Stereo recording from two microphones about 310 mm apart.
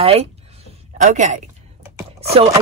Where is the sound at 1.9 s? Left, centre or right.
Centre.